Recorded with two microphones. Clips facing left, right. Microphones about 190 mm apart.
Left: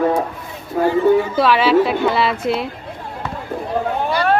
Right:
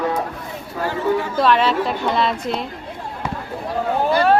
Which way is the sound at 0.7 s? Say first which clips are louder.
Left 7 dB; 60° left (ahead or behind).